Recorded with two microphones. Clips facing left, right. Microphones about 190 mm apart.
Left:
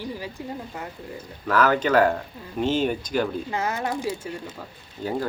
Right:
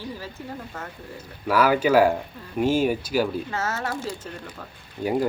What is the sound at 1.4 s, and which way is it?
Speech, 10° right (ahead or behind).